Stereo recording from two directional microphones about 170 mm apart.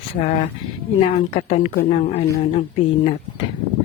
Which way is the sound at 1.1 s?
40° left (ahead or behind).